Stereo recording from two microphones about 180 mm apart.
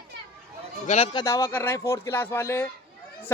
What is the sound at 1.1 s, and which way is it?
Speech, 20° left (ahead or behind).